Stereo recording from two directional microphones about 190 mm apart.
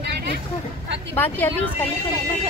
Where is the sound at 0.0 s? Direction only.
60° right (ahead or behind).